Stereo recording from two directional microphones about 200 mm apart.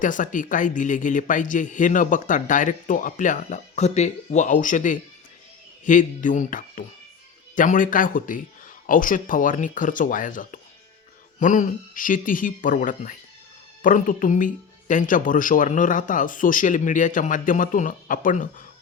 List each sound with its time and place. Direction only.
0.0 s speech: 40° left (ahead or behind)